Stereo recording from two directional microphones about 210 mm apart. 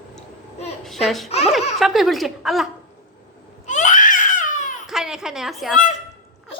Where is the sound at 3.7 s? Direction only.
35° left (ahead or behind).